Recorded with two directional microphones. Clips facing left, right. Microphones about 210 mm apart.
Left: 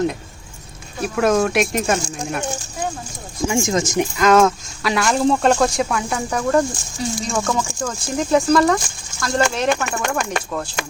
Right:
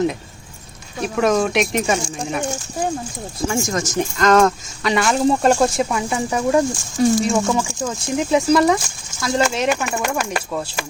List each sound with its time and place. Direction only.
1.0 s speech: centre (ahead or behind)
3.5 s speech: 20° left (ahead or behind); by 10.8 s 5° right (ahead or behind)